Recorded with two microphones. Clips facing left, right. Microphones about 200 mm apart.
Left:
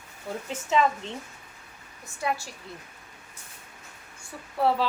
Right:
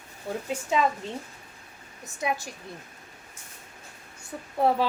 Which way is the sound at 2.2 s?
20° right (ahead or behind).